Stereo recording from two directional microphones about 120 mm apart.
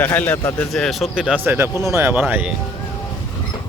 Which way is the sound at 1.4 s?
20° right (ahead or behind).